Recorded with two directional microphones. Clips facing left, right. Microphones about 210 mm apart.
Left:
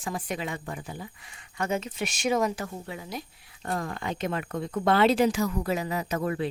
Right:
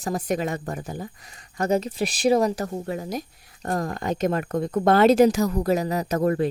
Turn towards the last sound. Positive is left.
turn(degrees=-45)  # may be behind; listen again after turning